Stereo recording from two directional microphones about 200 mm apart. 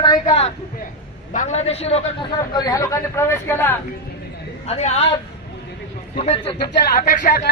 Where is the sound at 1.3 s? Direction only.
35° left (ahead or behind).